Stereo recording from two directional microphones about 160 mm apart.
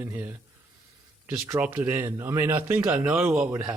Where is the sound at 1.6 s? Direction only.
10° right (ahead or behind).